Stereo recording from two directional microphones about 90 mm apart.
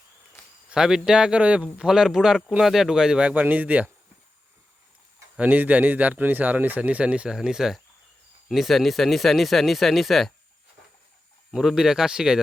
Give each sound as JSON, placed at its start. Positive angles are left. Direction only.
{"t": 0.7, "sound": "speech", "side_deg": -5}
{"t": 5.4, "sound": "speech", "side_deg": -20}
{"t": 11.5, "sound": "speech", "side_deg": -5}